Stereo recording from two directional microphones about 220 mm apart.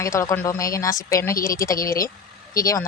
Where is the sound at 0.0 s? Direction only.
15° left (ahead or behind).